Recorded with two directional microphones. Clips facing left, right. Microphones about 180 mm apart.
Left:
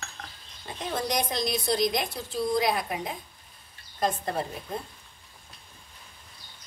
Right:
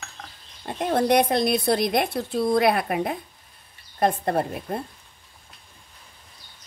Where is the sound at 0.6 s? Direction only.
60° right (ahead or behind).